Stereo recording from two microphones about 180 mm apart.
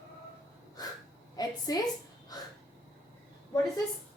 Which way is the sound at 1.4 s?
20° left (ahead or behind).